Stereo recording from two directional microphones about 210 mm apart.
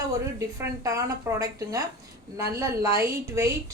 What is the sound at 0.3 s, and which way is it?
A woman's voice, 15° right (ahead or behind).